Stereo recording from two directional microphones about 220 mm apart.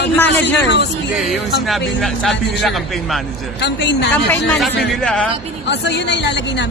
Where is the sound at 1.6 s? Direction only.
Centre (ahead or behind).